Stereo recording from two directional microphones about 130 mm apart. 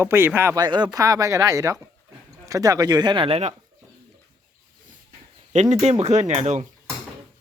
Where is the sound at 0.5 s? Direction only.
35° right (ahead or behind).